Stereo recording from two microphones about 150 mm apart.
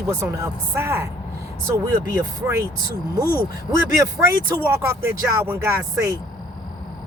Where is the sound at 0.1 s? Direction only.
20° right (ahead or behind).